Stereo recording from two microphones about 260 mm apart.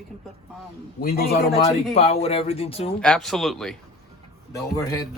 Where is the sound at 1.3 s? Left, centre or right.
Left.